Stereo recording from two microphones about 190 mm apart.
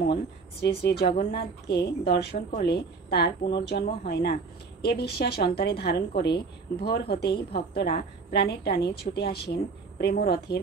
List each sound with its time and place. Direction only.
0.6 s a woman's voice: 55° left (ahead or behind)